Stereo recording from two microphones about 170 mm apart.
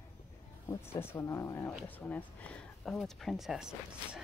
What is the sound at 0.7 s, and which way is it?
Speech, 15° left (ahead or behind).